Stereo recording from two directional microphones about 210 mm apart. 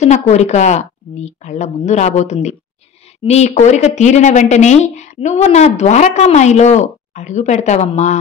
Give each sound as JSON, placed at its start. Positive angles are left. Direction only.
{"t": 0.0, "sound": "speech", "side_deg": 30}